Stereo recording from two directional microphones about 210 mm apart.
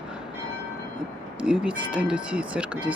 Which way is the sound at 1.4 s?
5° right (ahead or behind).